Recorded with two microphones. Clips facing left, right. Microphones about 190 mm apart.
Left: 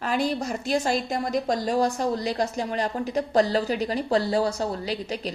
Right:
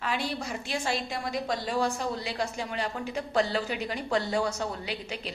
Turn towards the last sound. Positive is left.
turn(degrees=40)  # may be behind; listen again after turning